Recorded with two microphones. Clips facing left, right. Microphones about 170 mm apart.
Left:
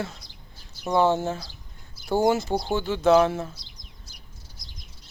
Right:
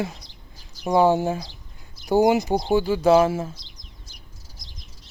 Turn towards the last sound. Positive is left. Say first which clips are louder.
# right 2 dB
turn(degrees=-5)  # may be behind; listen again after turning